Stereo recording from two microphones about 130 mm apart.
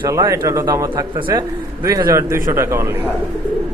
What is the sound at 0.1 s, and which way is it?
A man's voice, 25° right (ahead or behind).